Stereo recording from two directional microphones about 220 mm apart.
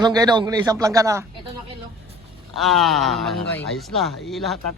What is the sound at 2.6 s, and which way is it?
Speech, centre (ahead or behind).